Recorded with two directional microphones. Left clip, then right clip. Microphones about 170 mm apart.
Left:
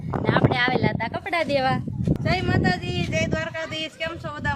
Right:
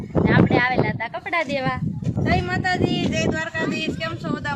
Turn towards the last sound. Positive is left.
turn(degrees=0)  # may be behind; listen again after turning